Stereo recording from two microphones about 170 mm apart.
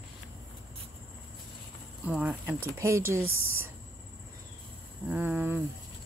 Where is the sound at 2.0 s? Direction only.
5° right (ahead or behind).